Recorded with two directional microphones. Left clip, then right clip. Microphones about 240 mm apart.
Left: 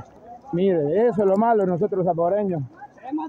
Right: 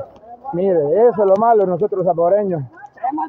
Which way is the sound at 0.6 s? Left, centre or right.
Centre.